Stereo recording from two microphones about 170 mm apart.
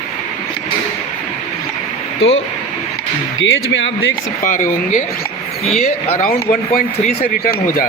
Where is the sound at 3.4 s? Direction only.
90° left.